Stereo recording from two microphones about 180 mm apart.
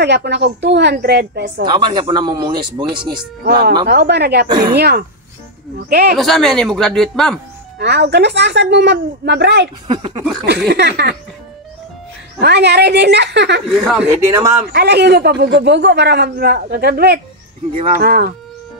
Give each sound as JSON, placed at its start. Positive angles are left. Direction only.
{"t": 0.0, "sound": "a woman's voice", "side_deg": -70}
{"t": 1.7, "sound": "speech", "side_deg": -25}
{"t": 3.4, "sound": "a man's voice", "side_deg": -60}
{"t": 6.1, "sound": "speech", "side_deg": 0}
{"t": 7.8, "sound": "a woman's voice", "side_deg": -70}
{"t": 9.8, "sound": "speech", "side_deg": -25}
{"t": 10.7, "sound": "a woman's voice", "side_deg": -65}
{"t": 12.4, "sound": "a woman's voice", "side_deg": -70}
{"t": 13.7, "sound": "speech", "side_deg": 0}
{"t": 14.2, "sound": "speech", "side_deg": -15}
{"t": 14.7, "sound": "a man's voice", "side_deg": -65}